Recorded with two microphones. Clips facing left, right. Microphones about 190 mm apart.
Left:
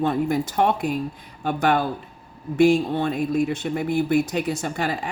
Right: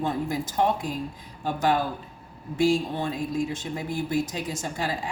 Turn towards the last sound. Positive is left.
turn(degrees=65)  # may be behind; listen again after turning